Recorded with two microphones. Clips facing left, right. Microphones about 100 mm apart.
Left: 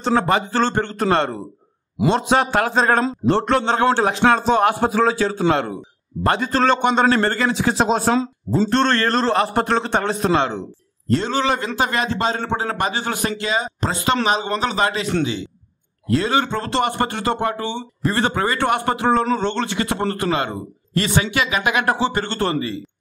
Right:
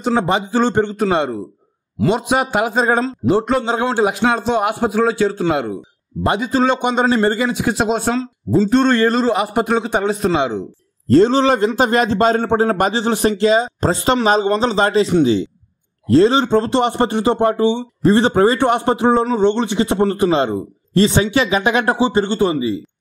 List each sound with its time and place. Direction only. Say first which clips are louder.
0.0 s a man's voice: right 1 dB; 15° right (ahead or behind)
11.1 s a man's voice: right 8 dB; 35° right (ahead or behind)
16.1 s a man's voice: right 7 dB; 30° right (ahead or behind)
21.9 s a man's voice: right 5 dB; 15° right (ahead or behind)